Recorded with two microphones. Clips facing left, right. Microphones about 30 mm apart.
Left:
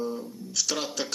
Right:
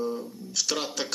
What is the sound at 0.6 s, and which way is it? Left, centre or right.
Speech, right.